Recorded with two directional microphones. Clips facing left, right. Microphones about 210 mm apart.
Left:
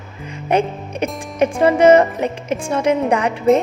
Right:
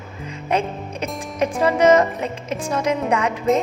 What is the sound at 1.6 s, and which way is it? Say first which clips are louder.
Music: left 4 dB; 30° left (ahead or behind).